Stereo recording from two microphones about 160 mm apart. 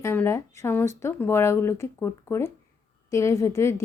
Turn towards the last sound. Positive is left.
turn(degrees=20)  # may be behind; listen again after turning